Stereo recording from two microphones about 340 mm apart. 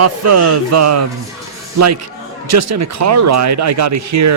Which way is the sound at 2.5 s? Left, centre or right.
Right.